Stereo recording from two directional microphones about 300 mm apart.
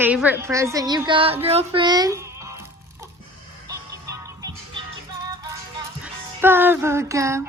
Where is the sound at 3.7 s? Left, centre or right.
Centre.